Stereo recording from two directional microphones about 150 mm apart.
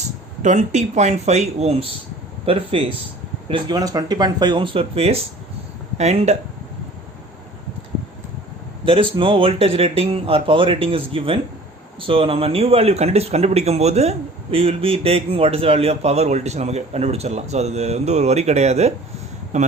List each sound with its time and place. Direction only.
0.4 s speech: 50° right (ahead or behind)
3.5 s speech: 25° right (ahead or behind); by 6.3 s 45° right (ahead or behind)
8.8 s speech: 35° right (ahead or behind); by 19.7 s 50° right (ahead or behind)